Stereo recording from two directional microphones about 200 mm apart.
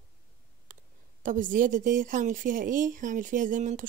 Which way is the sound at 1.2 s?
40° right (ahead or behind).